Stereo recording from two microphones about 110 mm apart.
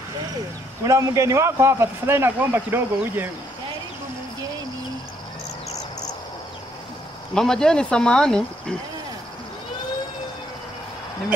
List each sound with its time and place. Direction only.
0.8 s a man's voice: 25° right (ahead or behind)
7.3 s speech: 5° left (ahead or behind)